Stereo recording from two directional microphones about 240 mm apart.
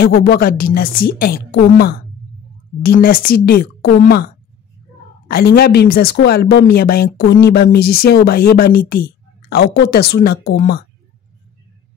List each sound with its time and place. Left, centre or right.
0.0 s speech: left
5.3 s speech: left